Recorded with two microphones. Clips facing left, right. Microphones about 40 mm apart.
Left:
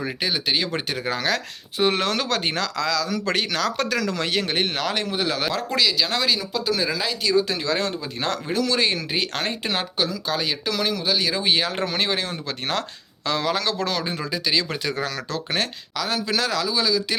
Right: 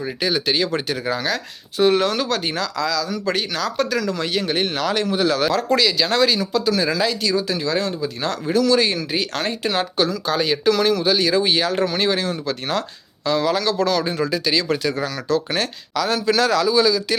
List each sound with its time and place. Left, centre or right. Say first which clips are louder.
0.3 s speech: right 5 dB; centre; by 4.5 s left
4.5 s speech: right 3 dB; left; by 7.3 s centre
7.3 s speech: even; left
10.0 s speech: right 5 dB; centre; by 12.8 s left
13.2 s speech: right 4 dB; left
13.5 s speech: right 5 dB; left
14.0 s speech: right 5 dB; centre
15.0 s speech: right 6 dB; left
16.0 s speech: right 6 dB; centre